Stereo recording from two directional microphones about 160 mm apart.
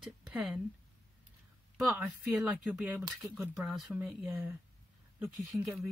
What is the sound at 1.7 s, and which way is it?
Speech, 5° right (ahead or behind).